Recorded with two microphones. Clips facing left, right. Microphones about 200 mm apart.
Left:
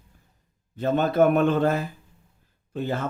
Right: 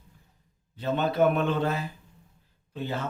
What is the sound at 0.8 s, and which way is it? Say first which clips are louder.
Speech: left 4 dB; 50° left (ahead or behind).